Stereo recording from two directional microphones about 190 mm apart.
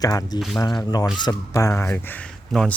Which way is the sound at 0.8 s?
20° left (ahead or behind).